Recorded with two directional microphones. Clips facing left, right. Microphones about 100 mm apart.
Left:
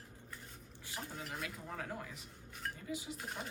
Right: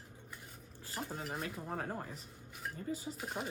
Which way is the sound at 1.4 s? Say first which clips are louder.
Right 4 dB; 35° right (ahead or behind).